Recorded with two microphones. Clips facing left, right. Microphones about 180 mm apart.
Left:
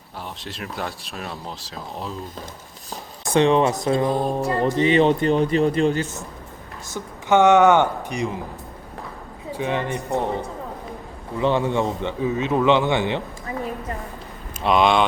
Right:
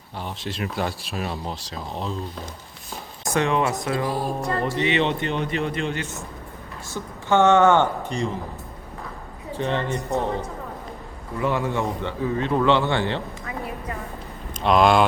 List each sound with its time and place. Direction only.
0.2 s speech: centre (ahead or behind)
3.3 s speech: 30° left (ahead or behind)
4.1 s speech: centre (ahead or behind)
4.8 s speech: 35° left (ahead or behind)
6.9 s speech: 15° left (ahead or behind)
9.6 s speech: 10° left (ahead or behind)
14.6 s speech: centre (ahead or behind)